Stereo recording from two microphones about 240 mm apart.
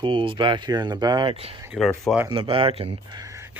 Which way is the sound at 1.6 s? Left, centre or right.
Centre.